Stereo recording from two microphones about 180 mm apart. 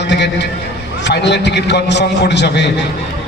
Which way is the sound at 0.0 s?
75° left (ahead or behind).